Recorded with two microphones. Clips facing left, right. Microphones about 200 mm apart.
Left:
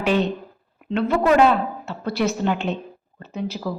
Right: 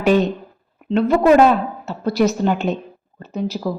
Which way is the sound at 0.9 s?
40° right (ahead or behind).